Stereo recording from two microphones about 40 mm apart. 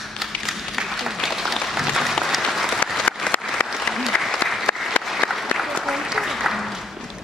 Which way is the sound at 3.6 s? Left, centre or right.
Left.